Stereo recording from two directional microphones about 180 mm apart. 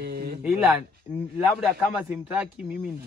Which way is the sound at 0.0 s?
60° right (ahead or behind).